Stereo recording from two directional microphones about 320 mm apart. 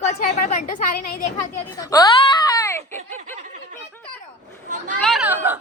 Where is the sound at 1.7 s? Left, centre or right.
Centre.